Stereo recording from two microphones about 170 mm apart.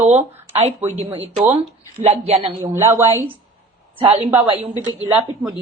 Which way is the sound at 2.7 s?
15° right (ahead or behind).